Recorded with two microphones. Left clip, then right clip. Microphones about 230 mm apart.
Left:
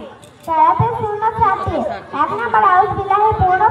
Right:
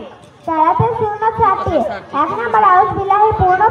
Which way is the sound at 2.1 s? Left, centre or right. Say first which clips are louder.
Right 1 dB; right.